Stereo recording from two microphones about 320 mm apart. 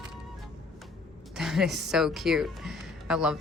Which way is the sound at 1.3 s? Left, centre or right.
Centre.